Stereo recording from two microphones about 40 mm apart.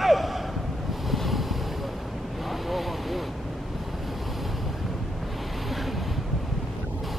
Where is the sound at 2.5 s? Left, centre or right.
Centre.